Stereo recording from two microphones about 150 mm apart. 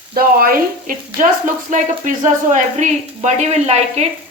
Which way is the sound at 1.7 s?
60° right (ahead or behind).